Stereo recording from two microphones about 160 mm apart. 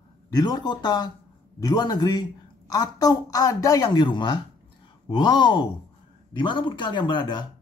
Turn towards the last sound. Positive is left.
turn(degrees=30)  # may be behind; listen again after turning